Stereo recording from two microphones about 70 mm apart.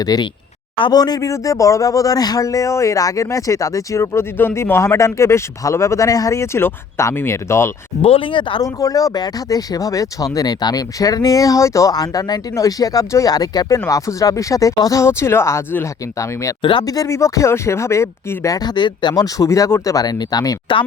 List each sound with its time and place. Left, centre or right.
0.0 s speech: left
1.3 s speech: left
8.6 s speech: left
11.9 s speech: left
12.5 s speech: left
13.3 s speech: left
13.7 s speech: left
15.0 s speech: left
15.8 s speech: left
18.5 s speech: left
19.5 s speech: left